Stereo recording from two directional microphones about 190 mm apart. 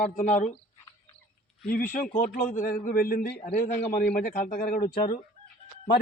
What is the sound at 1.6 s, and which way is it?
A man's voice, 45° left (ahead or behind).